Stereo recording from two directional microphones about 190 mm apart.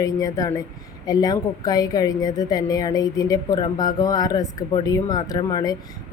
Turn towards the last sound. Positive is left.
turn(degrees=20)  # may be behind; listen again after turning